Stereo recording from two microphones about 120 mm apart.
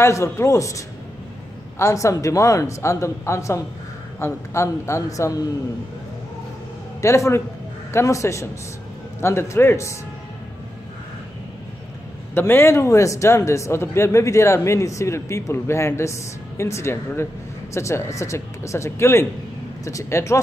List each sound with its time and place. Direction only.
0.0 s speech: 25° left (ahead or behind)
7.0 s speech: 25° left (ahead or behind)
12.4 s speech: 20° left (ahead or behind)